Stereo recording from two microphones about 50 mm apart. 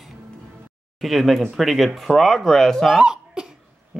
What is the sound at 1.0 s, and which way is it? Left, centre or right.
A child's voice, centre.